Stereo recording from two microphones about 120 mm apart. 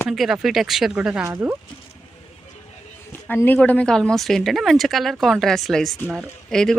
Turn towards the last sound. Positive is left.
turn(degrees=5)  # may be behind; listen again after turning